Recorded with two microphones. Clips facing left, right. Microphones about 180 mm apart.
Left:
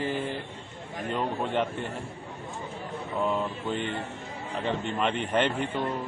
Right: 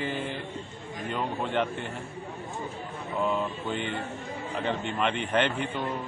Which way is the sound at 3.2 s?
Centre (ahead or behind).